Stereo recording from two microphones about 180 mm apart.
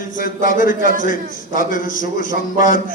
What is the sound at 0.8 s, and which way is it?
Speech, 45° right (ahead or behind).